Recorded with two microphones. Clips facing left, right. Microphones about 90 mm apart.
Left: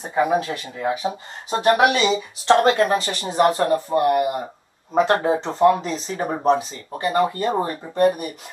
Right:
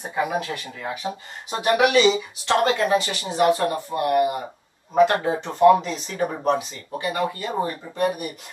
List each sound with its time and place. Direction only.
0.2 s speech: 35° left (ahead or behind)
1.5 s speech: 35° left (ahead or behind)